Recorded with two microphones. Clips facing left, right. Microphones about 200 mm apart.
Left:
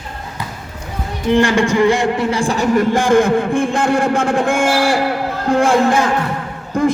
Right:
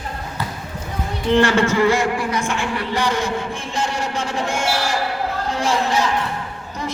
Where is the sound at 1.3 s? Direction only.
15° left (ahead or behind).